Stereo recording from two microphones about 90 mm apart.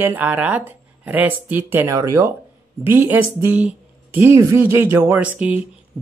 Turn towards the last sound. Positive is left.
turn(degrees=-15)  # may be behind; listen again after turning